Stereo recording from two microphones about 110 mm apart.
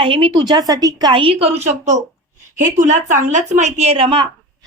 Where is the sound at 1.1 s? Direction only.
55° right (ahead or behind).